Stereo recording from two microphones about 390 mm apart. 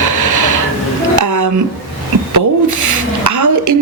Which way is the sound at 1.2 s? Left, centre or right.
Right.